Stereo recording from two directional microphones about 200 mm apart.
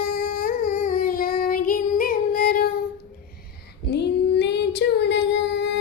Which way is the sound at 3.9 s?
60° left (ahead or behind).